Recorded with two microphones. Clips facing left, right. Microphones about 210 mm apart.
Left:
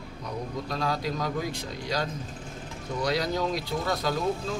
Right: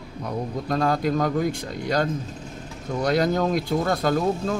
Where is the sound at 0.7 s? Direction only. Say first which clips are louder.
Right 9 dB; 50° right (ahead or behind).